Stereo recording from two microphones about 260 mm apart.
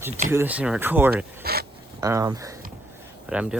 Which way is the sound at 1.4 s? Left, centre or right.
Right.